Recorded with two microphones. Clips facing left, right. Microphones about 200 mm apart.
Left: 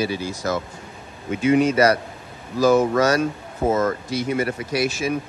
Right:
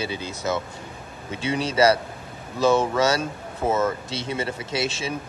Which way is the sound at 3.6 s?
30° left (ahead or behind).